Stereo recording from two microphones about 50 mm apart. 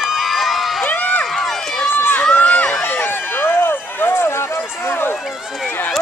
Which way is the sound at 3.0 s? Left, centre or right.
Left.